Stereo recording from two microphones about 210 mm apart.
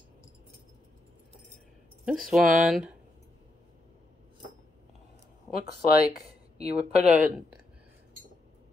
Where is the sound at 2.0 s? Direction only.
Centre (ahead or behind).